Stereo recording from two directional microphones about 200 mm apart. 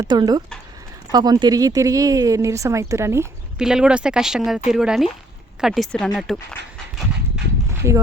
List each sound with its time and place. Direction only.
0.0 s speech: 20° right (ahead or behind)
3.6 s speech: 5° right (ahead or behind)
7.3 s a sound: 5° right (ahead or behind)